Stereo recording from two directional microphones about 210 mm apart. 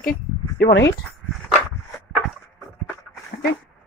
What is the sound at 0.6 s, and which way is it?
Speech, 55° left (ahead or behind).